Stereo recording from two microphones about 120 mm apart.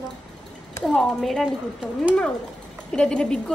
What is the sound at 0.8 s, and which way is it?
Speech, 5° left (ahead or behind).